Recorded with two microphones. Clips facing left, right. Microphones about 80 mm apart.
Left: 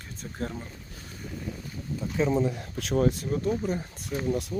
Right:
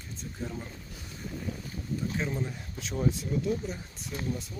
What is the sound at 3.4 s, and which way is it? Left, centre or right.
Speech, left.